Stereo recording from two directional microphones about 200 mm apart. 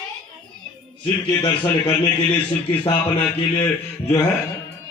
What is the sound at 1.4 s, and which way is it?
Speech, 25° left (ahead or behind).